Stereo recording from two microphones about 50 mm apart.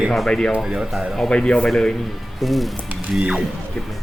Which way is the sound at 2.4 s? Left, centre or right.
Centre.